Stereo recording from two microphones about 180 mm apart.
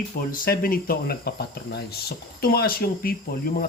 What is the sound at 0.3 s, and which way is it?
Speech, 50° left (ahead or behind).